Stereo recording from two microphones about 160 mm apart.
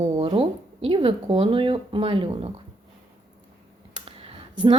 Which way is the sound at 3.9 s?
35° right (ahead or behind).